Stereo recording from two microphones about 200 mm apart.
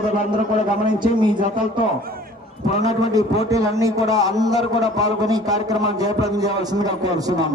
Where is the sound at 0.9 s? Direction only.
25° right (ahead or behind).